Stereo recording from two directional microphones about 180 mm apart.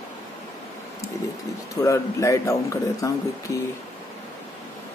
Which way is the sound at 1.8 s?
15° left (ahead or behind).